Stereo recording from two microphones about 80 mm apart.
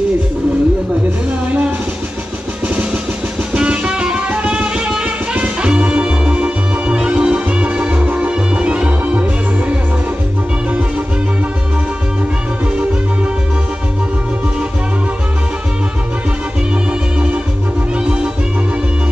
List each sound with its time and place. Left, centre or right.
2.7 s drum: centre
3.5 s music: centre
17.9 s music: centre